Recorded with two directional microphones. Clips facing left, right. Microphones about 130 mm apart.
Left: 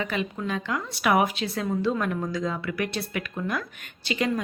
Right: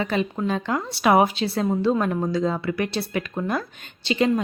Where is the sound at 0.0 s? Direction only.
35° right (ahead or behind).